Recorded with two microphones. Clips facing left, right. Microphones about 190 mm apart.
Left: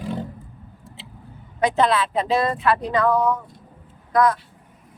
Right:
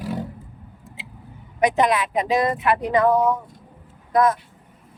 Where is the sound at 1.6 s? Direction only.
15° right (ahead or behind).